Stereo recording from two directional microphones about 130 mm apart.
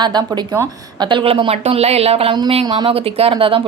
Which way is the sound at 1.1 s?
45° right (ahead or behind).